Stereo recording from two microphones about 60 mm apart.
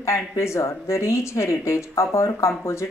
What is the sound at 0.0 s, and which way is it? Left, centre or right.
Speech, left.